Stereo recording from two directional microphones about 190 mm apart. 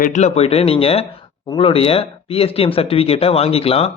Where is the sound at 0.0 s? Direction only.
40° left (ahead or behind).